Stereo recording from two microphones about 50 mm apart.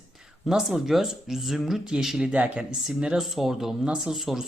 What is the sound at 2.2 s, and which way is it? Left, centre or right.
Speech, right.